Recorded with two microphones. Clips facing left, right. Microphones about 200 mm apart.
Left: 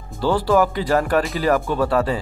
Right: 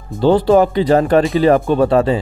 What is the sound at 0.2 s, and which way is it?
Speech, 20° right (ahead or behind).